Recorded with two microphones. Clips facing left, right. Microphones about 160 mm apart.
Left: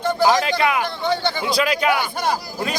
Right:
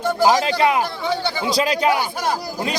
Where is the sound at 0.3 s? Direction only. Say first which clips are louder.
Right 2 dB; 30° right (ahead or behind).